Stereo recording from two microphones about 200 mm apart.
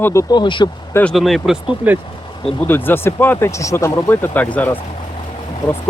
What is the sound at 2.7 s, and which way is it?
Speech, 10° left (ahead or behind).